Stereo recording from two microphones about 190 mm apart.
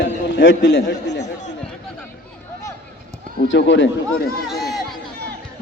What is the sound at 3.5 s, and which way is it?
Speech, 75° left (ahead or behind).